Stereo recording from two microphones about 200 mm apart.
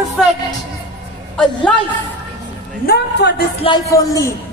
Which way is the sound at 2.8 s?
55° left (ahead or behind).